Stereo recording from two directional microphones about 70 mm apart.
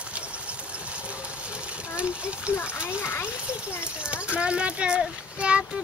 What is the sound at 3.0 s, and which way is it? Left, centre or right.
Speech, left.